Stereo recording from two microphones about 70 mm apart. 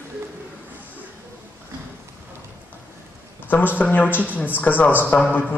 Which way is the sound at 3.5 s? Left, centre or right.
Left.